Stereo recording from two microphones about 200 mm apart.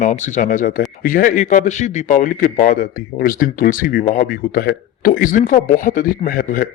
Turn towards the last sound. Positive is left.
turn(degrees=45)  # may be behind; listen again after turning